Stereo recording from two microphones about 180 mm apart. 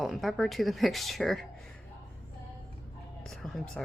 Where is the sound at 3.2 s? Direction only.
Centre (ahead or behind).